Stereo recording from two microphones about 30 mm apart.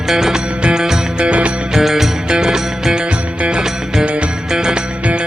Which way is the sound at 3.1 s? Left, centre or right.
Right.